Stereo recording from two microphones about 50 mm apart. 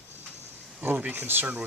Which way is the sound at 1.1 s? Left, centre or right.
Right.